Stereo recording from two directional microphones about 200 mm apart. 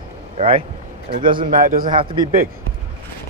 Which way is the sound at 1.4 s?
45° right (ahead or behind).